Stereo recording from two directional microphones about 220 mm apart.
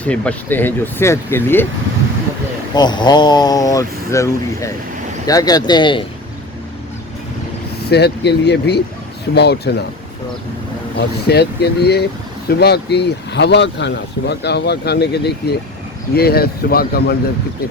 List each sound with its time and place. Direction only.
0.0 s speech: 5° left (ahead or behind)
2.7 s speech: 20° left (ahead or behind)
7.8 s speech: 50° left (ahead or behind)
11.3 s speech: 50° left (ahead or behind)